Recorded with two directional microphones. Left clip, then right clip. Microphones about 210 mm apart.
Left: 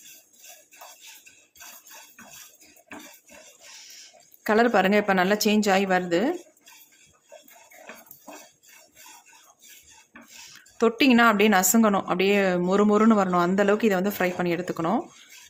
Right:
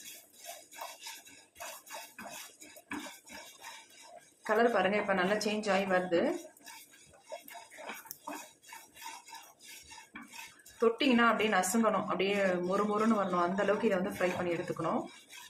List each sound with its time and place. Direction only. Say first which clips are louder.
4.4 s a woman's voice: left 8 dB; 50° left (ahead or behind)
10.8 s a woman's voice: left 8 dB; 50° left (ahead or behind)